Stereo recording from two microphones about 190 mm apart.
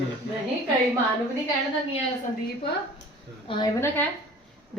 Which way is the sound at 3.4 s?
25° left (ahead or behind).